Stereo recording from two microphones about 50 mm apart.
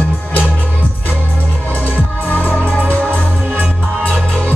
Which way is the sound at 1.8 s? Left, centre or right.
Left.